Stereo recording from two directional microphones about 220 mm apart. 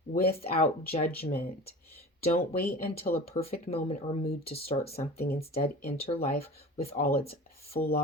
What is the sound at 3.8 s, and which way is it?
Speech, 30° left (ahead or behind).